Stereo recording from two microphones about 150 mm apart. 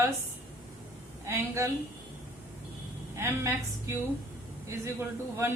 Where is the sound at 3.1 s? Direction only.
20° right (ahead or behind).